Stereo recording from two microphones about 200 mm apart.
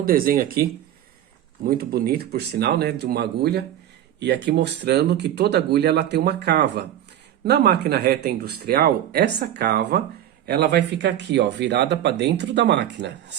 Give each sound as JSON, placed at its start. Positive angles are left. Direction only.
{"t": 0.0, "sound": "speech", "side_deg": -45}
{"t": 1.6, "sound": "speech", "side_deg": -50}